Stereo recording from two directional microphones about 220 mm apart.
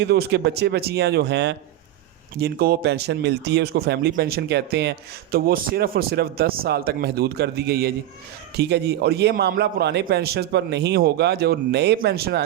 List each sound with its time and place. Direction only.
0.0 s speech: 50° right (ahead or behind)